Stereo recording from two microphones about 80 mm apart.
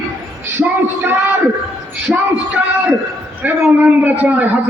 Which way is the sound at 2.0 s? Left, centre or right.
Centre.